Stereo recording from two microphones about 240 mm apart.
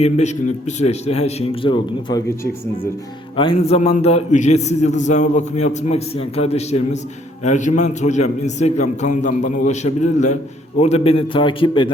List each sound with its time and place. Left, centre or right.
0.0 s a man's voice: left
3.6 s a man's voice: left